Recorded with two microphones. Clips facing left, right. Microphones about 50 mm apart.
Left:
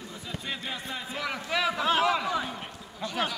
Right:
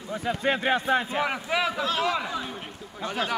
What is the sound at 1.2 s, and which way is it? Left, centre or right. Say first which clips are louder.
Speech: right 4 dB; right.